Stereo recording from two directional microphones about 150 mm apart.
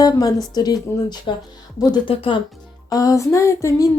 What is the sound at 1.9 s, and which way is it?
Speech, 35° left (ahead or behind).